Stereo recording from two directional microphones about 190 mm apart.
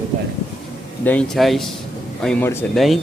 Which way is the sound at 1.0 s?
5° left (ahead or behind).